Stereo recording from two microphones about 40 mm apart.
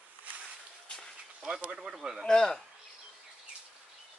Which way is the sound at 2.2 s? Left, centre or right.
Centre.